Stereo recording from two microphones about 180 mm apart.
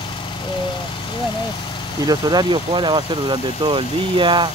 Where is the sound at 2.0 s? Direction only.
20° right (ahead or behind).